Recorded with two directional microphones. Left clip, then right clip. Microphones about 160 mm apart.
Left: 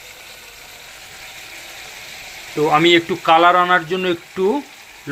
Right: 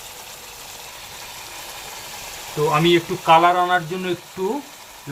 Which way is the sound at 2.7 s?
45° left (ahead or behind).